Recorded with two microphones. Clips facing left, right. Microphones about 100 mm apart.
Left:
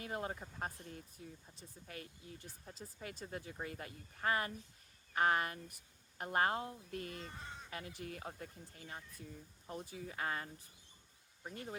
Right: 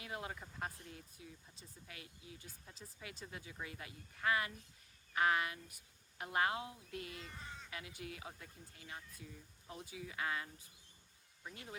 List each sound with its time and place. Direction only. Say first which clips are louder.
0.0 s speech: left 4 dB; 40° left (ahead or behind)